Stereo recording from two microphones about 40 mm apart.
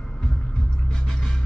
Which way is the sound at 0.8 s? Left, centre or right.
Centre.